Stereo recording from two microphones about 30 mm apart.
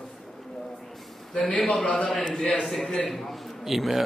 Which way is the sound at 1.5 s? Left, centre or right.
Left.